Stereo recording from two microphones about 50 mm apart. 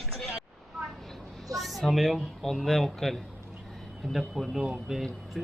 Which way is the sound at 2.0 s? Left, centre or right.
Centre.